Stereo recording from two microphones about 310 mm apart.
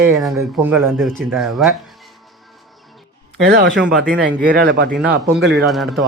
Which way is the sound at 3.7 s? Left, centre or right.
Centre.